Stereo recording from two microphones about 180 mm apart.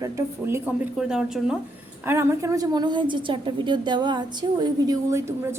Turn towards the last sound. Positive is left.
turn(degrees=-20)  # may be behind; listen again after turning